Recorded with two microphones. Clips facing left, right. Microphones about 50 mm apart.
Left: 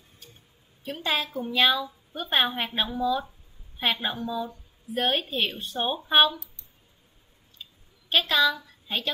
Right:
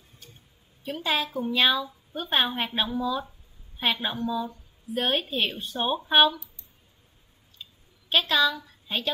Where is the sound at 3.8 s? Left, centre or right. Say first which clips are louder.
Even; centre.